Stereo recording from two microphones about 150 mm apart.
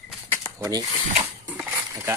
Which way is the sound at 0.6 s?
25° right (ahead or behind).